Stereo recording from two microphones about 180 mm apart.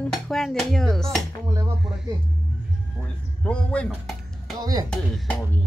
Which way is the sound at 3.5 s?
5° left (ahead or behind).